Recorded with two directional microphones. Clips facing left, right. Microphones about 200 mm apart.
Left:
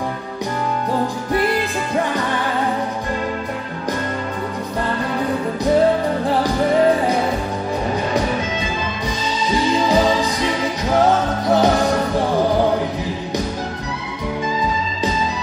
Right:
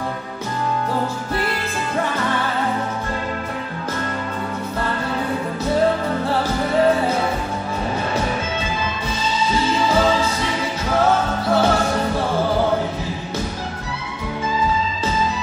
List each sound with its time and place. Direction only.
9.7 s music: 15° left (ahead or behind)
11.4 s music: 15° left (ahead or behind)